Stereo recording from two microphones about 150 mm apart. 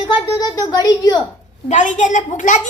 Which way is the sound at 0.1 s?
25° left (ahead or behind).